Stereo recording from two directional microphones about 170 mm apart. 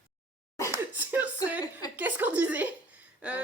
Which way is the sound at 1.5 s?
10° right (ahead or behind).